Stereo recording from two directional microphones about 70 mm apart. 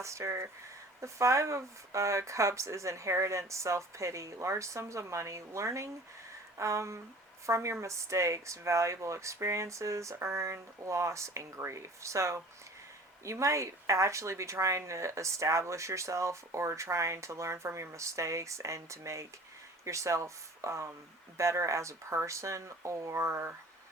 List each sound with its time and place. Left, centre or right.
0.0 s speech: right